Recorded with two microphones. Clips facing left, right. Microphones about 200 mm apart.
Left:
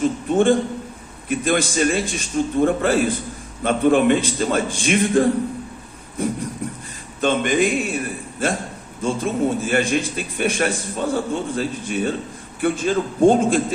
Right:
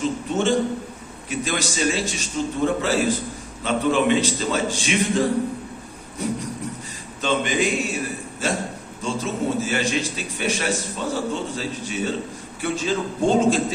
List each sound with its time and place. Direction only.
0.3 s a man's voice: 55° left (ahead or behind)